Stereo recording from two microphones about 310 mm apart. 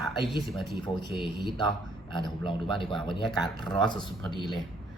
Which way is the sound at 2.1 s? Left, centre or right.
Centre.